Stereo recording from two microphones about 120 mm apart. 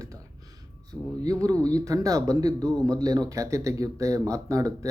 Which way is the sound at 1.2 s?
30° right (ahead or behind).